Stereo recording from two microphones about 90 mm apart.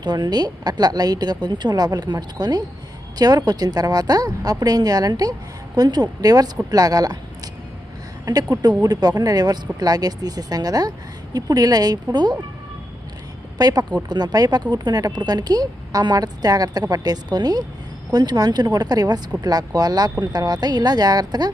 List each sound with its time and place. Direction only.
0.0 s speech: 50° right (ahead or behind)
8.2 s speech: 45° right (ahead or behind)
13.6 s speech: 45° right (ahead or behind)